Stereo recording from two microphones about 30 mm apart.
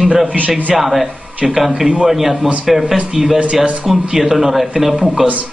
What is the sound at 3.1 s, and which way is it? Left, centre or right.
Speech, right.